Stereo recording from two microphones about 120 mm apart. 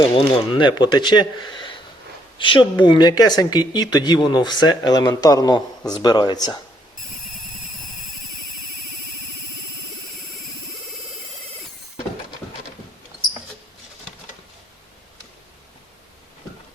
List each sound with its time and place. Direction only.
0.0 s speech: 40° left (ahead or behind)